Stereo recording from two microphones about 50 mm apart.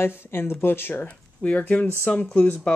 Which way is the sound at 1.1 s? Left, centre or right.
Left.